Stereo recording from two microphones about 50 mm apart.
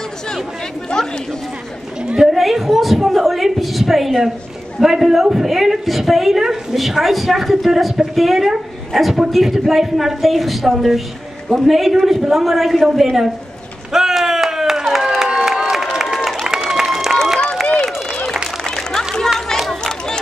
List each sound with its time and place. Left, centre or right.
0.8 s chatter: centre
2.3 s a woman's voice: centre
13.9 s crowd: centre
16.4 s a sound: centre
18.8 s run: centre
19.5 s run: centre